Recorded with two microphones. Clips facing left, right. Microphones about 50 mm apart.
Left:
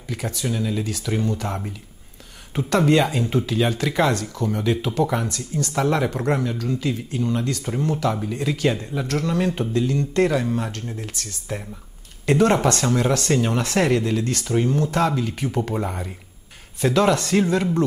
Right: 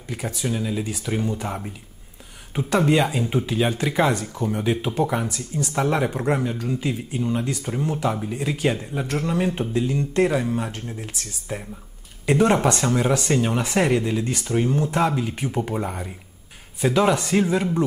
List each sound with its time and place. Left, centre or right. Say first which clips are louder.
0.1 s speech: even; centre
6.6 s speech: left 1 dB; centre
15.7 s speech: left 1 dB; centre
16.8 s speech: left 1 dB; centre